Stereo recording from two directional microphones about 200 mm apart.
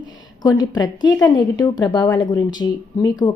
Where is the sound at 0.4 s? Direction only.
20° left (ahead or behind).